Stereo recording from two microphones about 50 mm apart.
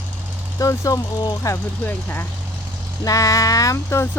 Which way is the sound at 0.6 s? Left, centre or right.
Left.